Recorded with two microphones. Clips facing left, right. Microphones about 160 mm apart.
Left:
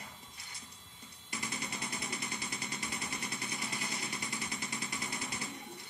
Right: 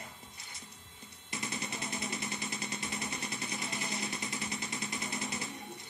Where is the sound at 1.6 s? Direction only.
20° right (ahead or behind).